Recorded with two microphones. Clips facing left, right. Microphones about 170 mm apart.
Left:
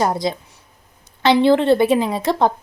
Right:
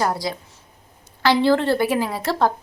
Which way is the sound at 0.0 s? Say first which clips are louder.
Left 4 dB; 20° left (ahead or behind).